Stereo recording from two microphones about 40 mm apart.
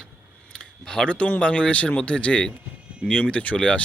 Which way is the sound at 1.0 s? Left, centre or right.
Left.